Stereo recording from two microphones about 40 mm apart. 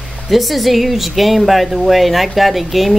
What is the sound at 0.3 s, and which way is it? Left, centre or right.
Speech, centre.